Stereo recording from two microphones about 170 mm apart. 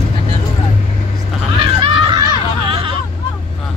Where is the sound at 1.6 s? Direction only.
25° right (ahead or behind).